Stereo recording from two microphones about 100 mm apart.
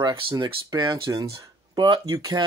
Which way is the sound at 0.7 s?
40° right (ahead or behind).